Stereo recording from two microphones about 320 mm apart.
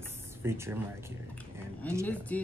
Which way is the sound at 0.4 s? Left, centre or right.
Centre.